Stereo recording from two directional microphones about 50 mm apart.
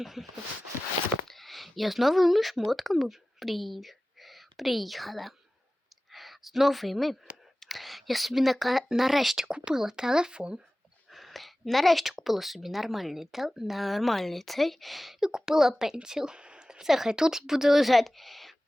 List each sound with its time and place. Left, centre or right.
0.0 s a woman's voice: centre
1.3 s a woman's voice: centre
9.5 s speech: centre
11.1 s a woman's voice: centre